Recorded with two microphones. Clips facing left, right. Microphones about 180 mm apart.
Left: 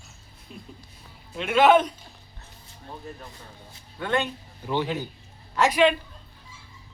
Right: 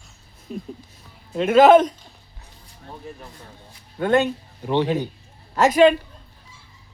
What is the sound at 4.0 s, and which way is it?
Speech, 45° right (ahead or behind).